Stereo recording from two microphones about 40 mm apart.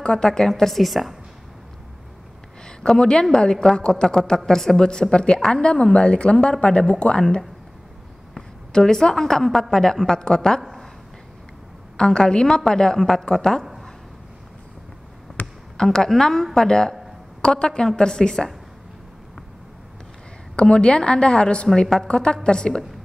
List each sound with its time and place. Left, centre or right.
0.0 s a woman's voice: centre
0.5 s a woman's voice: centre
2.6 s a woman's voice: left
8.4 s a woman's voice: centre
12.0 s a woman's voice: centre
15.4 s basketball bounce: left
15.8 s a woman's voice: centre
20.5 s a woman's voice: left